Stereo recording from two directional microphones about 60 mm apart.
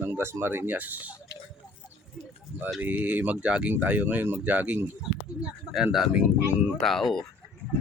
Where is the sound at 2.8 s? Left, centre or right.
Right.